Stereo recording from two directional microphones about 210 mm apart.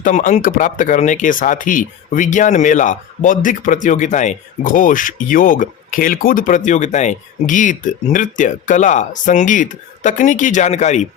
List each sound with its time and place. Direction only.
0.0 s speech: 35° left (ahead or behind)